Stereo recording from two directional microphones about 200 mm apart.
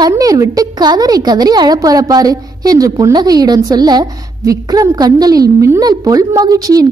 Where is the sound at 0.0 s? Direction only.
15° right (ahead or behind).